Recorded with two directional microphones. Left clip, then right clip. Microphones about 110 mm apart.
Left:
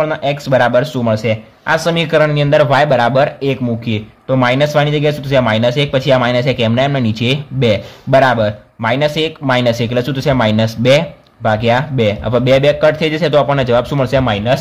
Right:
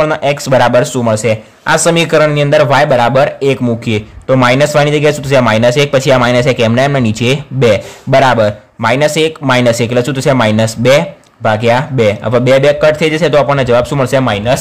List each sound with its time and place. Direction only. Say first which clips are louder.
0.0 s speech: right 4 dB; 30° right (ahead or behind)
3.6 s a man's voice: right 5 dB; 40° right (ahead or behind); by 14.6 s 15° right (ahead or behind)